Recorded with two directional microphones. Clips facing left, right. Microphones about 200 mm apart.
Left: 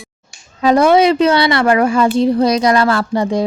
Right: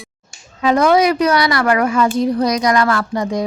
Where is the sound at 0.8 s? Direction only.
25° left (ahead or behind).